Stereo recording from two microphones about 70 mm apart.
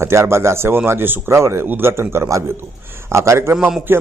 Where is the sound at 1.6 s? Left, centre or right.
Right.